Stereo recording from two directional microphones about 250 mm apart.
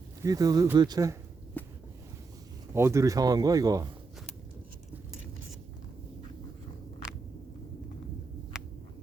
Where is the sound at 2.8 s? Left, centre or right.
Centre.